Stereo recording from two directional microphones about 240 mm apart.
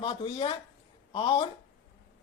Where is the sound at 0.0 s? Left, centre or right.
Left.